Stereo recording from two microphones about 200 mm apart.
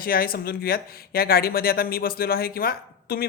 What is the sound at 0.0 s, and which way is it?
Speech, 45° left (ahead or behind).